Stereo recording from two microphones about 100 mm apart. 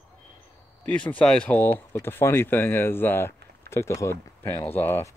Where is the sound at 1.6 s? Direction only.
20° left (ahead or behind).